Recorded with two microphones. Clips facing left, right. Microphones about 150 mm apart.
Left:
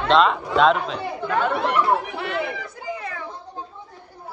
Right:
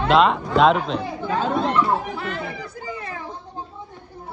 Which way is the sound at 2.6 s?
30° right (ahead or behind).